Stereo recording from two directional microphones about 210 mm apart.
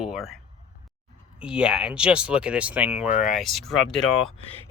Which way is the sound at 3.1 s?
35° left (ahead or behind).